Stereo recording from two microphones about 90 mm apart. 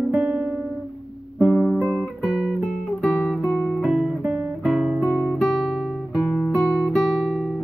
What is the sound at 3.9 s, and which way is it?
Guitar, 10° right (ahead or behind).